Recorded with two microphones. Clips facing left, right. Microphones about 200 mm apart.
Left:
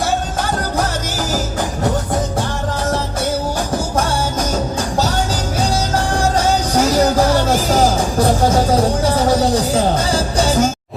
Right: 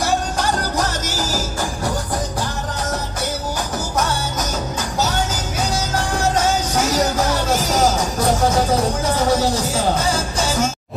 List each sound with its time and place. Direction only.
6.1 s music: 35° left (ahead or behind)
9.0 s music: 35° left (ahead or behind)